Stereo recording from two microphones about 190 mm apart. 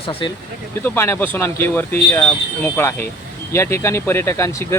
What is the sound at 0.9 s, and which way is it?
Speech, 15° left (ahead or behind).